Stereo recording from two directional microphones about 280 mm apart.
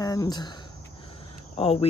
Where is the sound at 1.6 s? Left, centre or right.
Left.